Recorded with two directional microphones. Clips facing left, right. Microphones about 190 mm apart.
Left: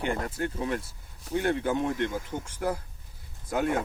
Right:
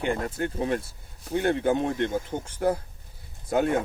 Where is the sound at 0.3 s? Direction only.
25° right (ahead or behind).